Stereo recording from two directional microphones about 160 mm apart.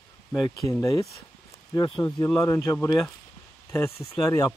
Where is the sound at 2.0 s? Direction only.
15° left (ahead or behind).